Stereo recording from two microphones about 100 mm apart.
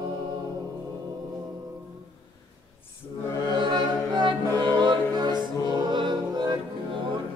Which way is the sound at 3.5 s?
50° right (ahead or behind).